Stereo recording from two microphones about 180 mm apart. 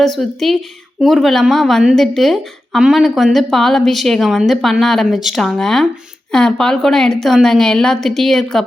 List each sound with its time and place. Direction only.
0.0 s a woman's voice: centre (ahead or behind)